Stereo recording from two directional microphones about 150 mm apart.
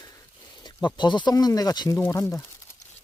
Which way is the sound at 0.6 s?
30° left (ahead or behind).